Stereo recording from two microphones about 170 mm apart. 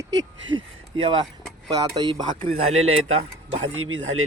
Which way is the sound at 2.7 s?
40° right (ahead or behind).